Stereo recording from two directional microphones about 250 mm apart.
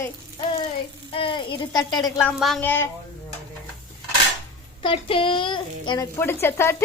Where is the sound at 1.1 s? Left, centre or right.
Centre.